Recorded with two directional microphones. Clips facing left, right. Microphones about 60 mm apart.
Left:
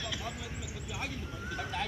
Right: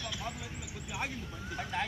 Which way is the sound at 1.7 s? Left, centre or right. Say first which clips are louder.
Right 2 dB; centre.